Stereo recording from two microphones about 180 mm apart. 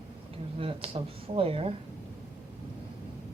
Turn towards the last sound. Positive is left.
turn(degrees=-30)  # may be behind; listen again after turning